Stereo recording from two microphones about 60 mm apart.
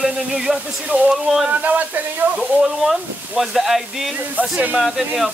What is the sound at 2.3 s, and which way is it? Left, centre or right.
Speech, centre.